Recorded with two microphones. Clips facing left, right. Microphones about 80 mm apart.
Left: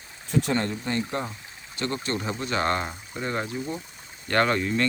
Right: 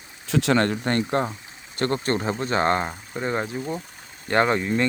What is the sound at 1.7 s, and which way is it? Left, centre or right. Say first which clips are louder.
Speech: right 5 dB; right.